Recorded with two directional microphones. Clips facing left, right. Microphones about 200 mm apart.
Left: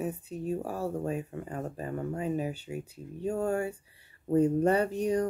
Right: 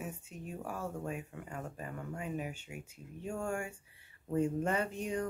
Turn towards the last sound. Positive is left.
turn(degrees=40)  # may be behind; listen again after turning